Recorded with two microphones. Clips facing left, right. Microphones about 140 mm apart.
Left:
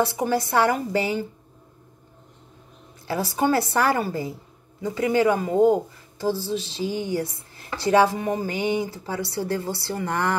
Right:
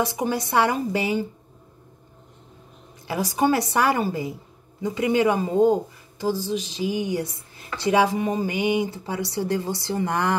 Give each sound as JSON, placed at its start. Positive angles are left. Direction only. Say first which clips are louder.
{"t": 0.0, "sound": "speech", "louder": "left 2 dB", "side_deg": -15}
{"t": 3.1, "sound": "speech", "louder": "right 1 dB", "side_deg": -15}